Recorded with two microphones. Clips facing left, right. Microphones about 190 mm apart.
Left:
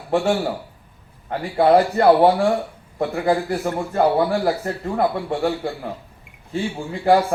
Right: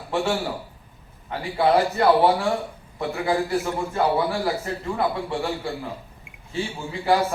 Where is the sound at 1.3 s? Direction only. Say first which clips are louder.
Left 5 dB; 50° left (ahead or behind).